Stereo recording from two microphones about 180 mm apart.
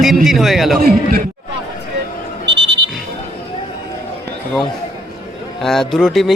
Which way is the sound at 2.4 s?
75° right (ahead or behind).